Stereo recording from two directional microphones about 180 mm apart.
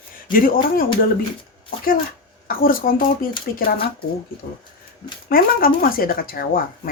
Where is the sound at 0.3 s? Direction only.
50° left (ahead or behind).